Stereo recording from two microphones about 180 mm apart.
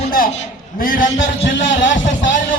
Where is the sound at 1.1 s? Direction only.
90° left.